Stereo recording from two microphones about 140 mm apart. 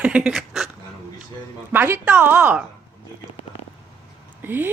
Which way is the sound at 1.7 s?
15° right (ahead or behind).